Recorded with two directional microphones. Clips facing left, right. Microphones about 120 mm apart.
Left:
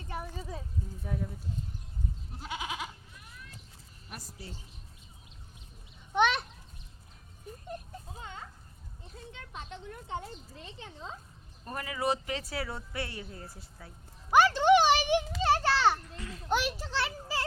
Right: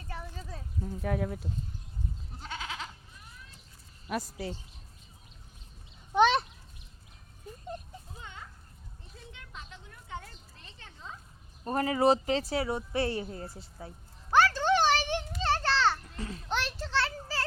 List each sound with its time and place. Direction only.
0.1 s a sound: 15° left (ahead or behind)
0.9 s speech: 75° right (ahead or behind)
2.4 s goat: 15° left (ahead or behind)
4.1 s speech: 90° right
6.1 s a sound: 35° right (ahead or behind)
8.1 s a sound: 30° left (ahead or behind)
10.1 s speech: 25° left (ahead or behind)
11.6 s speech: 35° right (ahead or behind)
13.0 s speech: 30° right (ahead or behind)
14.3 s a sound: 15° left (ahead or behind)
15.4 s children playing: 10° left (ahead or behind)
16.1 s a child's voice: 30° right (ahead or behind)
16.5 s children playing: 10° left (ahead or behind)